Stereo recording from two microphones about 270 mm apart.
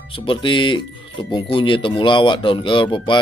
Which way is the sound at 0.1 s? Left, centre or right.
Centre.